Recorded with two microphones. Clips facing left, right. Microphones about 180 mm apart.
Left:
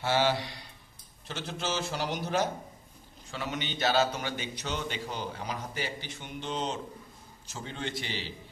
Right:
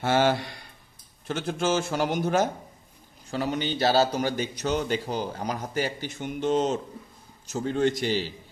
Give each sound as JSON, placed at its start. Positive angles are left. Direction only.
{"t": 0.0, "sound": "a man's voice", "side_deg": -50}
{"t": 3.3, "sound": "a man's voice", "side_deg": -40}